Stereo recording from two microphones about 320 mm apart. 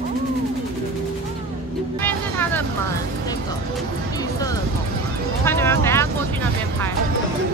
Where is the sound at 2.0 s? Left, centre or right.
Centre.